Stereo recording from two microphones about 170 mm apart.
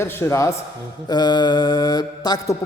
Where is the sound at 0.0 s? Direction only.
15° left (ahead or behind).